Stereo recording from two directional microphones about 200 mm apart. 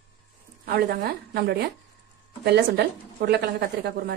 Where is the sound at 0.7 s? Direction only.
50° right (ahead or behind).